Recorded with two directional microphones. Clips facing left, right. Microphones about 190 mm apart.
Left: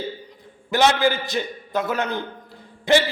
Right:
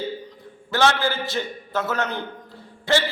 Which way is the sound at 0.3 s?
15° left (ahead or behind).